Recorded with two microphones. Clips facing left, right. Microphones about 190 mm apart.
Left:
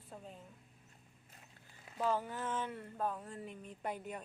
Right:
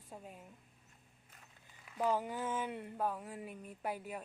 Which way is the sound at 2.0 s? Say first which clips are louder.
Right 1 dB; 15° right (ahead or behind).